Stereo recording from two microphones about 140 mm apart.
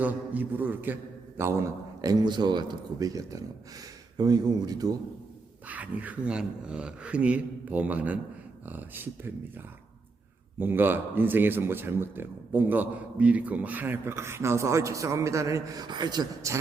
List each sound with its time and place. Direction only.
0.0 s a man's voice: 10° right (ahead or behind); by 4.9 s 25° right (ahead or behind)
5.6 s a man's voice: 10° right (ahead or behind)
10.6 s a man's voice: 15° right (ahead or behind)